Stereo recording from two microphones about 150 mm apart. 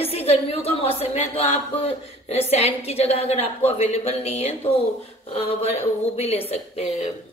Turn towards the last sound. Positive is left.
turn(degrees=45)  # may be behind; listen again after turning